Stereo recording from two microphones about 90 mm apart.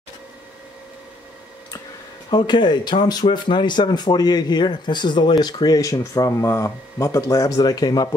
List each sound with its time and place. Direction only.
2.3 s speech: 55° left (ahead or behind)